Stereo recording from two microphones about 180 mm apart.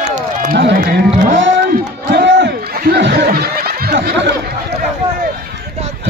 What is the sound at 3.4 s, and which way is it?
Music, 60° right (ahead or behind).